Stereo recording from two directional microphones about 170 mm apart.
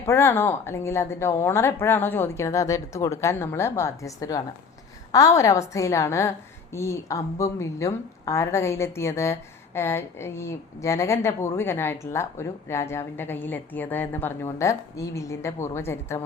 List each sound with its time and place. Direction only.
0.0 s a woman's voice: 15° left (ahead or behind)